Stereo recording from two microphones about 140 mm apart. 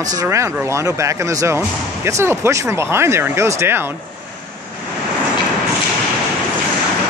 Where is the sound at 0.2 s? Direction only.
20° right (ahead or behind).